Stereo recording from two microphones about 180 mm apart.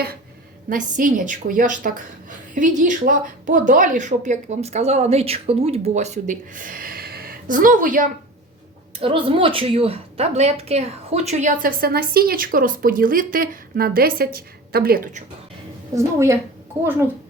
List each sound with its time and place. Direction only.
0.7 s speech: 45° right (ahead or behind)
9.0 s a woman's voice: 30° right (ahead or behind); by 15.2 s 55° right (ahead or behind)
16.0 s a woman's voice: 15° right (ahead or behind)